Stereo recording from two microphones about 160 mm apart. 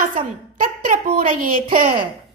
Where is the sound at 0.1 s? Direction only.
60° right (ahead or behind).